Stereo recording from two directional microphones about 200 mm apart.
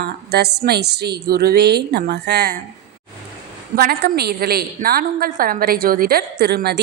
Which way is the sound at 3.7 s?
50° right (ahead or behind).